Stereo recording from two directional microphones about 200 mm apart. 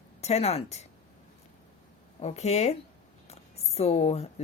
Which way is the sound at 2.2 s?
35° left (ahead or behind).